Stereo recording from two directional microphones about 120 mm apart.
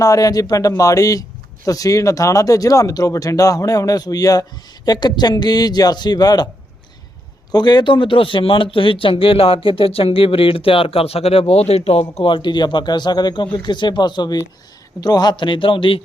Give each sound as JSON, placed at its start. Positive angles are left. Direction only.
{"t": 0.0, "sound": "speech", "side_deg": 30}
{"t": 7.5, "sound": "speech", "side_deg": 35}